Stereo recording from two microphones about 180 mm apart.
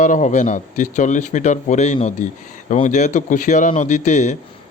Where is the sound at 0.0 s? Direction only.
45° left (ahead or behind).